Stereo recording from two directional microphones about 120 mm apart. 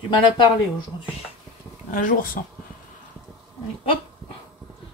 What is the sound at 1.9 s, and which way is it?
Speech, 90° left.